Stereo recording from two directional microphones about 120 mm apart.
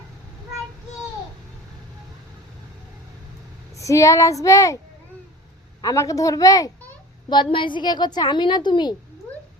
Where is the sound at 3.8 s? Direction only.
25° left (ahead or behind).